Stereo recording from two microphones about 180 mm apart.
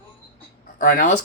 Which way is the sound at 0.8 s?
45° left (ahead or behind).